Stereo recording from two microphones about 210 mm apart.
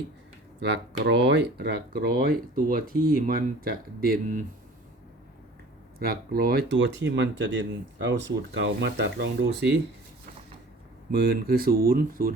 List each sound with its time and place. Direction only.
0.6 s speech: 55° right (ahead or behind)
6.0 s speech: 45° right (ahead or behind)
11.1 s speech: 50° right (ahead or behind)